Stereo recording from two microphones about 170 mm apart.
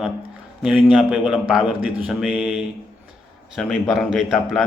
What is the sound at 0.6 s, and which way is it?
A man's voice, 5° right (ahead or behind).